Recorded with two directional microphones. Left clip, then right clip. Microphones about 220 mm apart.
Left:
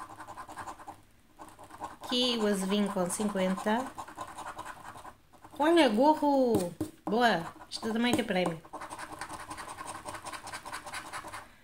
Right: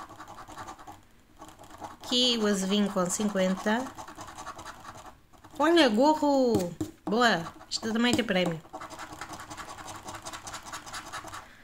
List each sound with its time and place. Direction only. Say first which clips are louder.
2.0 s speech: right 3 dB; 15° right (ahead or behind)
5.6 s speech: right 2 dB; 15° right (ahead or behind)